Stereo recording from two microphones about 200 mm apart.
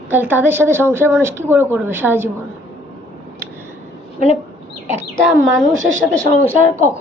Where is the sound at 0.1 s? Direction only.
10° right (ahead or behind).